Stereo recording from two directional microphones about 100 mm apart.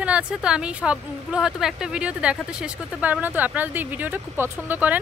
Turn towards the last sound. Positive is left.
turn(degrees=-20)  # may be behind; listen again after turning